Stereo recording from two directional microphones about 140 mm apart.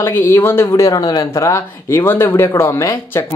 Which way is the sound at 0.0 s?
20° left (ahead or behind).